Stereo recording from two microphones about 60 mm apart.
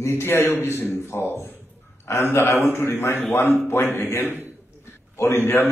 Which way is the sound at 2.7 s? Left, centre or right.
Left.